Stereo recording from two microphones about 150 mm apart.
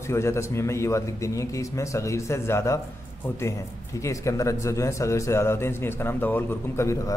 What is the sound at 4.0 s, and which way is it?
A man's voice, 20° left (ahead or behind).